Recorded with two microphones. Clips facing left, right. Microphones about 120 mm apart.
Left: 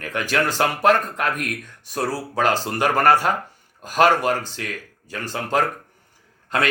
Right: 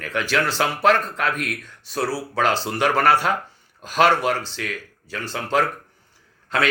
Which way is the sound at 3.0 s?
45° left (ahead or behind).